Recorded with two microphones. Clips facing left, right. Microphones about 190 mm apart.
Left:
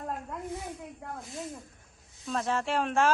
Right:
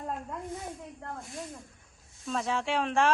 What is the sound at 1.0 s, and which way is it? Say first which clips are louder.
Speech: right 1 dB; 5° left (ahead or behind).